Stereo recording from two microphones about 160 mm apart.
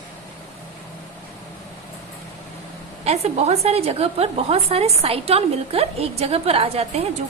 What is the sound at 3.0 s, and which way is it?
A woman's voice, 40° right (ahead or behind).